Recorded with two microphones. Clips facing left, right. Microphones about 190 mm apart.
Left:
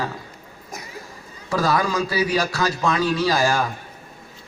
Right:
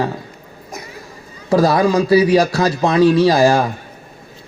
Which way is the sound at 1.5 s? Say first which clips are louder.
Right 8 dB; 35° right (ahead or behind).